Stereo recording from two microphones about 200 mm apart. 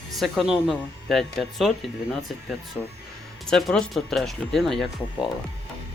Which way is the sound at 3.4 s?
5° left (ahead or behind).